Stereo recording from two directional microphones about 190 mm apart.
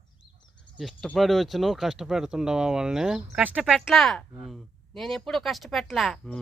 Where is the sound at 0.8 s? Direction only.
Centre (ahead or behind).